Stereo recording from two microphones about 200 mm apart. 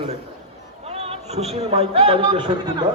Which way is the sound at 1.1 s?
30° right (ahead or behind).